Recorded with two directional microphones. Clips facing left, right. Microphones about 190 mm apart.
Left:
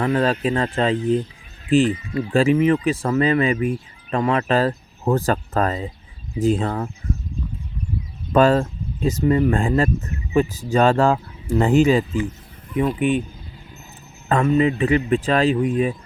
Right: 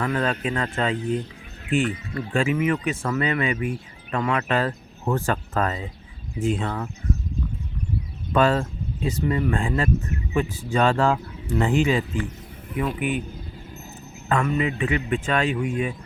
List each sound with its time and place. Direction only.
0.0 s speech: 30° left (ahead or behind)
2.3 s speech: 35° left (ahead or behind)
8.3 s speech: 40° left (ahead or behind)
12.7 s speech: 25° left (ahead or behind)
14.3 s speech: 35° left (ahead or behind)